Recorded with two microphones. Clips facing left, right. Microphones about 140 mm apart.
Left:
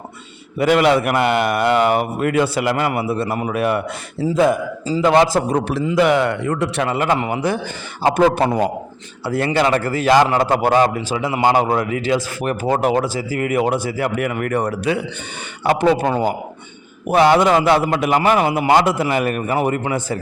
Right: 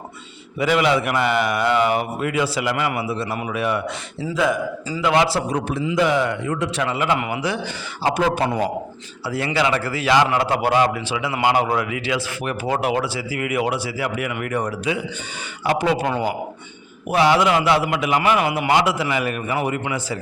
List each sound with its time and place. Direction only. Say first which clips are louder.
0.6 s speech: left 4 dB; 55° left (ahead or behind)
4.9 s speech: left 5 dB; 40° left (ahead or behind)
5.5 s a man's voice: left 4 dB; 65° left (ahead or behind)
6.8 s speech: left 2 dB; 45° left (ahead or behind)
7.2 s a man's voice: left 4 dB; 35° left (ahead or behind)
7.4 s speech: left 4 dB; 50° left (ahead or behind)
14.7 s a man's voice: left 4 dB; 60° left (ahead or behind)
17.1 s speech: left 4 dB; 55° left (ahead or behind)
18.2 s speech: left 3 dB; 35° left (ahead or behind)